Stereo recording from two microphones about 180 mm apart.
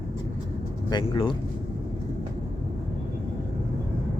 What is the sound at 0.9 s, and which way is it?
Speech, 25° left (ahead or behind).